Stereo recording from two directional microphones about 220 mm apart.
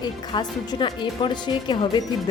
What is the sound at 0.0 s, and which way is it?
A woman's voice, 20° left (ahead or behind).